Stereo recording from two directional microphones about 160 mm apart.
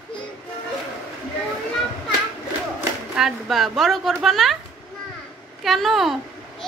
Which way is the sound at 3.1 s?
Centre (ahead or behind).